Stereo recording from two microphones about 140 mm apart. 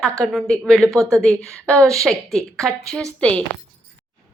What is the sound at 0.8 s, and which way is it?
Speech, 20° right (ahead or behind).